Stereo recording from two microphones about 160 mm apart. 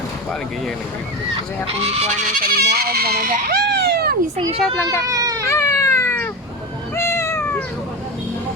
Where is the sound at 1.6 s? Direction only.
40° right (ahead or behind); by 4.1 s 80° right.